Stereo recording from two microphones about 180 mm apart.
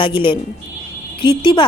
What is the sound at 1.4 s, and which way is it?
Speech, 25° left (ahead or behind).